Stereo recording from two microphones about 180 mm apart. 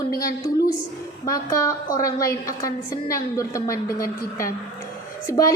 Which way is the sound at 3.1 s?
15° left (ahead or behind).